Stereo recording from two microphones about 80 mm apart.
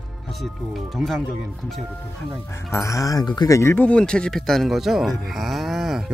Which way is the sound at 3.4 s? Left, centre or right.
Left.